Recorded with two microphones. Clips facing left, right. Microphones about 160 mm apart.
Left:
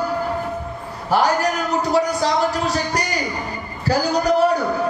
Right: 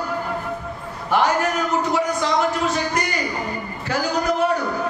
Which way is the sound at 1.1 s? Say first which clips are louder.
Left 1 dB; 35° left (ahead or behind).